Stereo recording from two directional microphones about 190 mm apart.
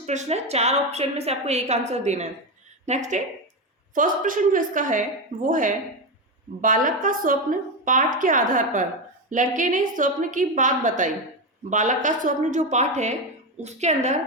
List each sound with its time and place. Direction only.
0.0 s a woman's voice: 35° right (ahead or behind)